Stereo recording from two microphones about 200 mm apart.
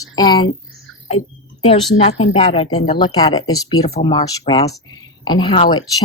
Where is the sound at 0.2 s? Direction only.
20° left (ahead or behind).